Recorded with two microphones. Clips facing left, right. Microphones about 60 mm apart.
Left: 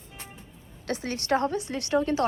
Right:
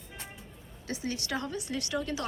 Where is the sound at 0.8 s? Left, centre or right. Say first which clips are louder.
Left 5 dB; left.